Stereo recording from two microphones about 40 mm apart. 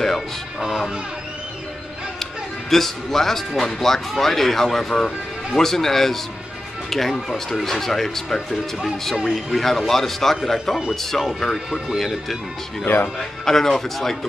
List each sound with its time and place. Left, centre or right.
2.7 s a man's voice: centre
11.5 s speech: centre
12.8 s speech: left
13.2 s speech: centre